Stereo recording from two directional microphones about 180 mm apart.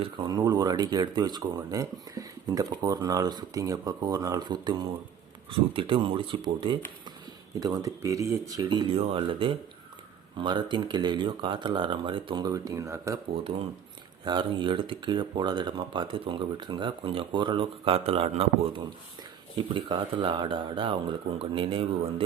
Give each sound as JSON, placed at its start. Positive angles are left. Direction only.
{"t": 0.0, "sound": "speech", "side_deg": -25}
{"t": 14.3, "sound": "speech", "side_deg": -25}